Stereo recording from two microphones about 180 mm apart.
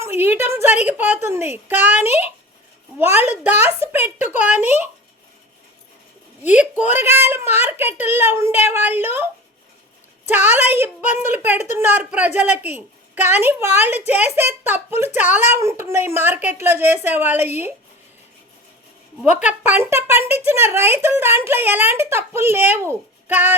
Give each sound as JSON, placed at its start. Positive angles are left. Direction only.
{"t": 0.0, "sound": "a woman's voice", "side_deg": -10}
{"t": 3.2, "sound": "a woman's voice", "side_deg": -10}
{"t": 6.4, "sound": "a woman's voice", "side_deg": -10}
{"t": 10.2, "sound": "a woman's voice", "side_deg": -10}
{"t": 11.5, "sound": "speech", "side_deg": 40}
{"t": 11.8, "sound": "a woman's voice", "side_deg": -10}
{"t": 19.5, "sound": "a woman's voice", "side_deg": -10}